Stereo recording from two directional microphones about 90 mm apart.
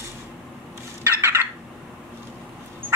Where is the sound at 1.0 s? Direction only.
30° right (ahead or behind).